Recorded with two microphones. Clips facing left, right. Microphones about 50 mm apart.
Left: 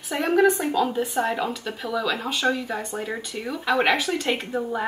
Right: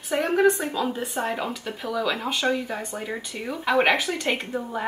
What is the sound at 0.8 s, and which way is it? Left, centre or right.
Speech, centre.